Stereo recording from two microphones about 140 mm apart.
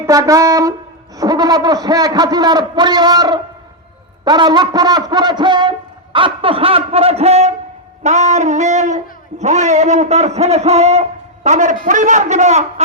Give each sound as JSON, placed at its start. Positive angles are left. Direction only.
{"t": 0.0, "sound": "a man's voice", "side_deg": -25}